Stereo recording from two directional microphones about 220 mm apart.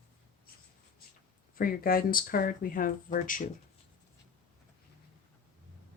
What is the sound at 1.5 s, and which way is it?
Speech, 40° left (ahead or behind).